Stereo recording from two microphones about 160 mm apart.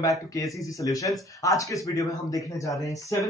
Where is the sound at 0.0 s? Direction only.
20° left (ahead or behind).